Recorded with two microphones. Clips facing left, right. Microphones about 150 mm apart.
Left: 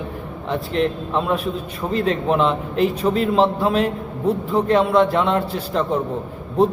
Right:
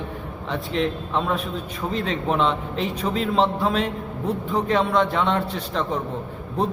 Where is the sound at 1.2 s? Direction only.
5° left (ahead or behind).